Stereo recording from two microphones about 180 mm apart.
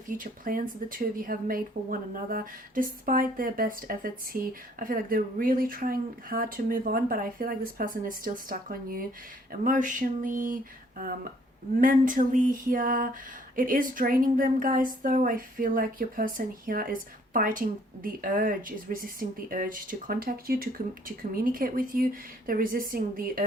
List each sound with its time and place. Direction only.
0.1 s a woman's voice: 50° right (ahead or behind)